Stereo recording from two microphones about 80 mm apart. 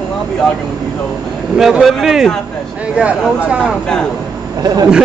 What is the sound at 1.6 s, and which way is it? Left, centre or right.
Speech, centre.